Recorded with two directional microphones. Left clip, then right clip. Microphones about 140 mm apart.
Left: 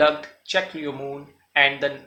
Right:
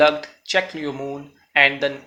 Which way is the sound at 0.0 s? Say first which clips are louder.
Right 3 dB; 30° right (ahead or behind).